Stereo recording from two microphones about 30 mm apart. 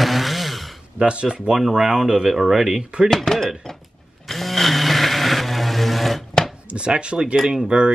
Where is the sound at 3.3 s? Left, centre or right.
Centre.